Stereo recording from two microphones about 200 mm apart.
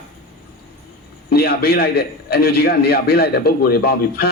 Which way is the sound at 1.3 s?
50° left (ahead or behind).